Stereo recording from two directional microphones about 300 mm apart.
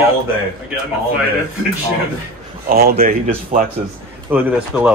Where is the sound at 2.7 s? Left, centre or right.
Right.